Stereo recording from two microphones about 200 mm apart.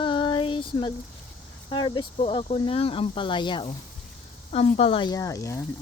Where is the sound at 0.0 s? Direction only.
25° left (ahead or behind).